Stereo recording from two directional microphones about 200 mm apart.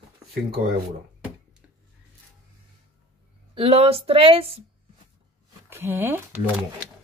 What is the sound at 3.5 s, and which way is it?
Speech, 30° right (ahead or behind).